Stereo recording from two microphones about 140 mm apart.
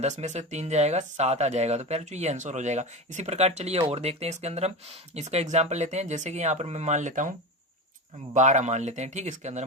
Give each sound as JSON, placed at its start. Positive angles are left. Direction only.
{"t": 0.0, "sound": "speech", "side_deg": -50}
{"t": 8.4, "sound": "speech", "side_deg": -55}